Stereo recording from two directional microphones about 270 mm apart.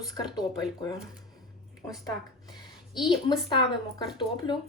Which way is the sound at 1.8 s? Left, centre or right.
Centre.